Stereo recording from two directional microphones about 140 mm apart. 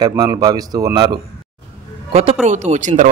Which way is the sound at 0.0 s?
30° right (ahead or behind).